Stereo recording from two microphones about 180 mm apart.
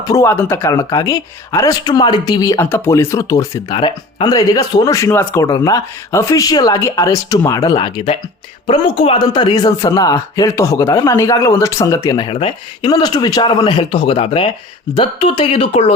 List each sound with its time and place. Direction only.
0.0 s speech: 15° left (ahead or behind)